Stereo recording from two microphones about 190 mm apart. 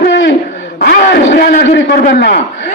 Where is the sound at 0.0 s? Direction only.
70° left (ahead or behind).